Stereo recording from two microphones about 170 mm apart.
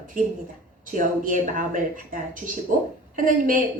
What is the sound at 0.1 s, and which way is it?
Speech, 55° right (ahead or behind).